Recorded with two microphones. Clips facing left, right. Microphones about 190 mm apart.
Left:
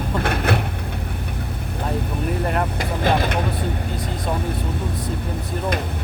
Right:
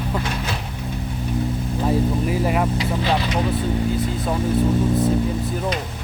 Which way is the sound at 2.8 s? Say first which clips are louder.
Left 1 dB; 50° left (ahead or behind).